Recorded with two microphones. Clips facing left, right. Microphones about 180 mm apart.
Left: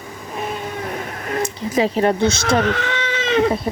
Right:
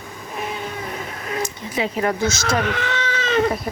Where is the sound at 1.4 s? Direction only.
45° left (ahead or behind).